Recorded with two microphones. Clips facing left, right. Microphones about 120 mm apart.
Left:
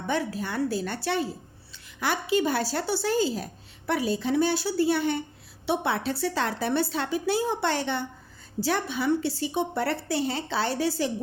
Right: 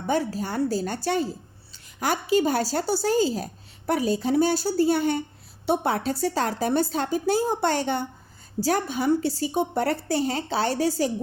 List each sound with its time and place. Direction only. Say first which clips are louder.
0.1 s a woman's voice: right 3 dB; 40° right (ahead or behind)